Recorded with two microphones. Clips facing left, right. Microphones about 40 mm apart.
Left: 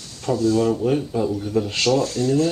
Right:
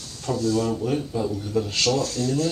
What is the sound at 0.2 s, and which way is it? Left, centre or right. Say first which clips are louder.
Speech: left 4 dB; centre.